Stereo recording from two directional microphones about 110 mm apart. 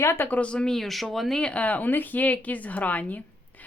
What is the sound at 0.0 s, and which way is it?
Speech, 20° left (ahead or behind).